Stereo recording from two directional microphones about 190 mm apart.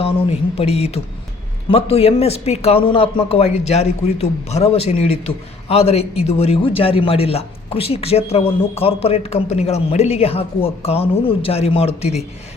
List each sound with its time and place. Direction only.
0.0 s a man's voice: 30° left (ahead or behind)